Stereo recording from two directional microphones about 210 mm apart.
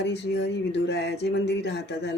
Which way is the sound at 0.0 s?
55° left (ahead or behind).